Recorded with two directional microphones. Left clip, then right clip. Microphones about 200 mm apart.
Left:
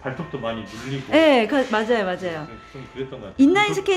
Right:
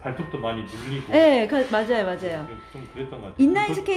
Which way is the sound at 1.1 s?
15° left (ahead or behind).